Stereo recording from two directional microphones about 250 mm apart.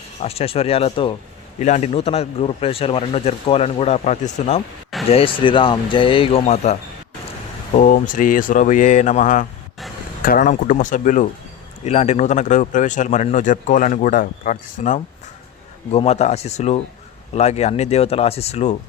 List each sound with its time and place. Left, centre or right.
0.2 s speech: left
7.8 s speech: left